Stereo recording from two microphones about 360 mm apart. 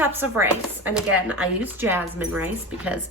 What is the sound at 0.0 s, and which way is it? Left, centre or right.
Speech, centre.